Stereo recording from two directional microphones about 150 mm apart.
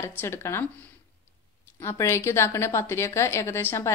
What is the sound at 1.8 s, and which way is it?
A woman's voice, 15° left (ahead or behind).